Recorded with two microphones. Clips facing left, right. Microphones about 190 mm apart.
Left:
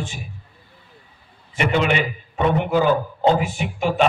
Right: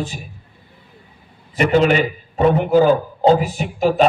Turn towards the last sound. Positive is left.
turn(degrees=-40)  # may be behind; listen again after turning